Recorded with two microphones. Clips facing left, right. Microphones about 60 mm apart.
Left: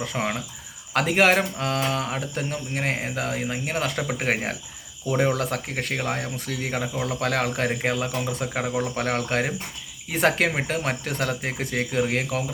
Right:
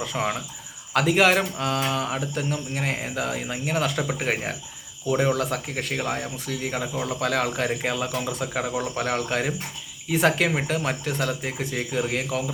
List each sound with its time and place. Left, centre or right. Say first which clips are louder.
0.0 s speech: right 1 dB; left
12.0 s speech: left 1 dB; left